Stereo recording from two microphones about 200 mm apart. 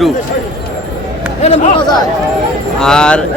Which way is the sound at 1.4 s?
30° left (ahead or behind).